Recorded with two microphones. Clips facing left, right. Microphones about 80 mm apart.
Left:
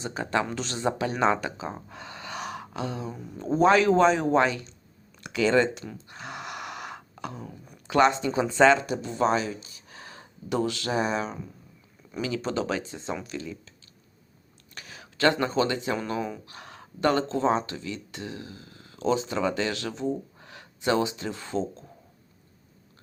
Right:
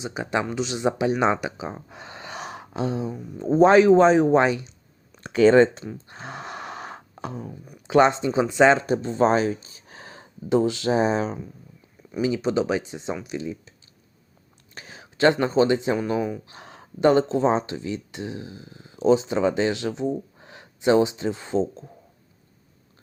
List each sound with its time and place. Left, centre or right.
0.0 s speech: centre
5.2 s speech: right
6.1 s a sound: right
7.9 s speech: right
8.7 s speech: right
12.2 s speech: centre
14.8 s speech: right
16.5 s speech: right